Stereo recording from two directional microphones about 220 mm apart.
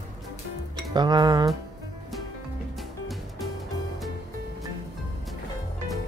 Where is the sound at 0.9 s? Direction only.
20° right (ahead or behind).